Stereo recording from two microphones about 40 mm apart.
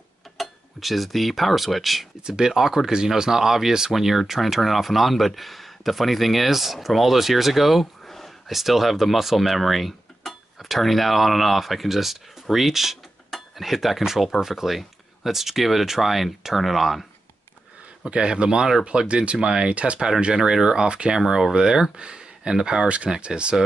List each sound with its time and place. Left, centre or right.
0.4 s speech: centre
2.2 s speech: centre
7.8 s a sound: centre
8.5 s speech: centre
18.0 s speech: right
20.3 s speech: centre
21.2 s speech: centre